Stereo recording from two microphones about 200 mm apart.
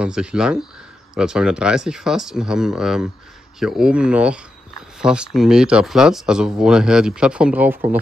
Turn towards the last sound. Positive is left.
turn(degrees=-10)  # may be behind; listen again after turning